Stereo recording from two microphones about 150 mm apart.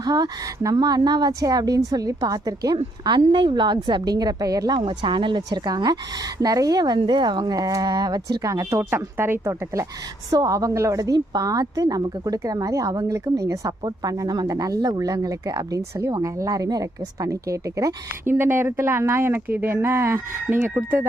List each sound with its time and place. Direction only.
0.0 s a woman's voice: 25° right (ahead or behind)